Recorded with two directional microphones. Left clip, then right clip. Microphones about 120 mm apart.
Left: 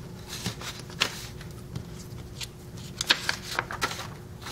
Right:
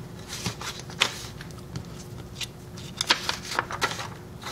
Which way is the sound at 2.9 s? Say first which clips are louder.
Right 1 dB; 5° right (ahead or behind).